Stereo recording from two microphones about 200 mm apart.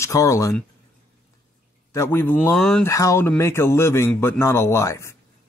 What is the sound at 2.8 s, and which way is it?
A man's voice, 15° left (ahead or behind).